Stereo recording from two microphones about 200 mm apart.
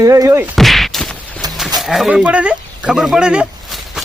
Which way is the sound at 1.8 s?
Centre (ahead or behind).